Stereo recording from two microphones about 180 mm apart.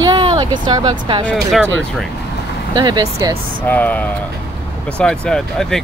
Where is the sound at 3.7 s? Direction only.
10° left (ahead or behind).